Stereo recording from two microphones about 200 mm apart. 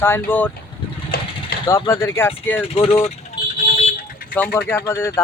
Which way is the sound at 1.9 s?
15° left (ahead or behind).